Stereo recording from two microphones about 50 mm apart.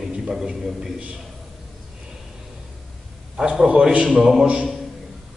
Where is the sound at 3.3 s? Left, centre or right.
Centre.